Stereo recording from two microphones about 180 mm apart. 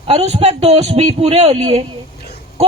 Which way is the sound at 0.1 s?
35° right (ahead or behind).